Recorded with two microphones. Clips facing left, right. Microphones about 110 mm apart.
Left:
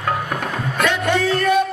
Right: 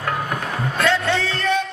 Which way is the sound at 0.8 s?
15° left (ahead or behind).